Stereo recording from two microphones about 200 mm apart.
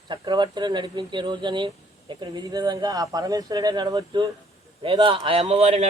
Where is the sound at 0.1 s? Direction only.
20° right (ahead or behind).